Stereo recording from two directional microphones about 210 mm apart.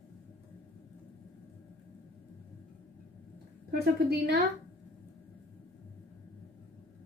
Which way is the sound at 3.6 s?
45° right (ahead or behind).